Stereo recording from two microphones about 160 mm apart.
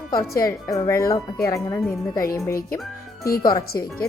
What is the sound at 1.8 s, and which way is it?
Speech, 5° left (ahead or behind).